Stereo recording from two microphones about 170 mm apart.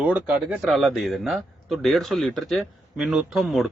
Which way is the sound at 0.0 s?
10° right (ahead or behind).